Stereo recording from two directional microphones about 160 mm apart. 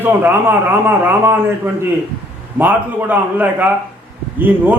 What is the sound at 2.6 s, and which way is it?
A man's voice, 10° right (ahead or behind).